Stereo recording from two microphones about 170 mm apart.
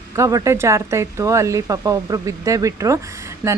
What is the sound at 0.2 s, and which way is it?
Speech, 20° right (ahead or behind).